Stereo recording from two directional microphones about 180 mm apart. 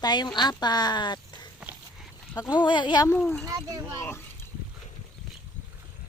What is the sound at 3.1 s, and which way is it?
Speech, 5° left (ahead or behind).